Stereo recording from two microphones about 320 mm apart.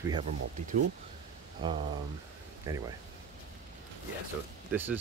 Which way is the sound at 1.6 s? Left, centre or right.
Centre.